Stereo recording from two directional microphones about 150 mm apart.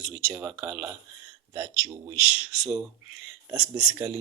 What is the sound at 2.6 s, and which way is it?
Speech, 5° right (ahead or behind).